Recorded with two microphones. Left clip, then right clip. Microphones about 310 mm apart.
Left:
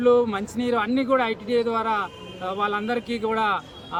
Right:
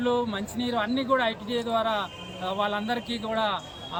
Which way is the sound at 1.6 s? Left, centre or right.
Centre.